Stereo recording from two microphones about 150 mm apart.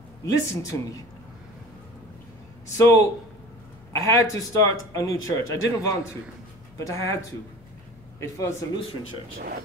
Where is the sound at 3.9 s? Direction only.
20° left (ahead or behind).